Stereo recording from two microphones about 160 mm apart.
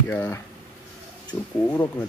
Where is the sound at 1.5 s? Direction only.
15° left (ahead or behind).